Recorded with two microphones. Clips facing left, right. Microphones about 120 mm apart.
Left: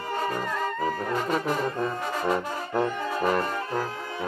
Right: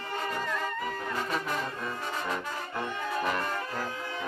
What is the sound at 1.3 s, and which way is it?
Brass instrument, 35° left (ahead or behind).